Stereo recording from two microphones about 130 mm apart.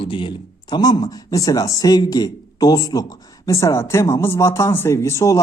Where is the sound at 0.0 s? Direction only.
40° left (ahead or behind).